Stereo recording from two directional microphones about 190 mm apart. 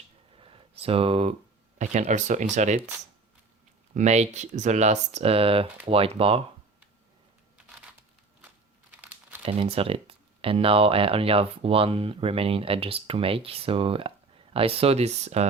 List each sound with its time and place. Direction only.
0.3 s a sound: 30° right (ahead or behind)
1.8 s speech: 40° right (ahead or behind)
3.9 s speech: 35° right (ahead or behind)
8.9 s crumpling: 10° right (ahead or behind)
9.4 s speech: 30° right (ahead or behind)